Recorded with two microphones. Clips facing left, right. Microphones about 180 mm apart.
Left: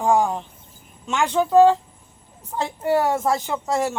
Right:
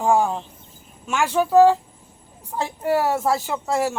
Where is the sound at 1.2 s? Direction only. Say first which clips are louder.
Even; 5° right (ahead or behind).